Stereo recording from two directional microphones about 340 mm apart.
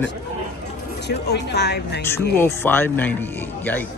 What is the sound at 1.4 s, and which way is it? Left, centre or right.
Speech, left.